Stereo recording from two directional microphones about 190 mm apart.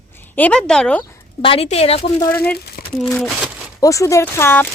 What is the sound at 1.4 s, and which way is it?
Speech, 30° left (ahead or behind).